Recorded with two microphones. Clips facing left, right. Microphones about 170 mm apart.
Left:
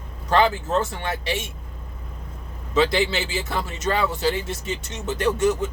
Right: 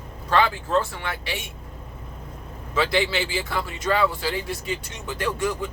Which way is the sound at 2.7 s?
20° left (ahead or behind).